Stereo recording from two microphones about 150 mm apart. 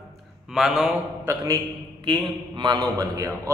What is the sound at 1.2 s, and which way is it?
A man's voice, 25° right (ahead or behind).